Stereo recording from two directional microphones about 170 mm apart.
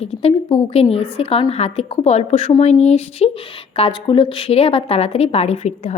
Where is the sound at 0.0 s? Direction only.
35° left (ahead or behind).